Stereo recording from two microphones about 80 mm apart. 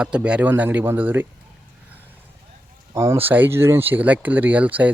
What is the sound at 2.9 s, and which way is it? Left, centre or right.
Speech, right.